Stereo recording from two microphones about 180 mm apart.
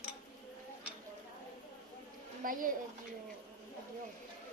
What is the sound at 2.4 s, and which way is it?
Speech, 50° right (ahead or behind).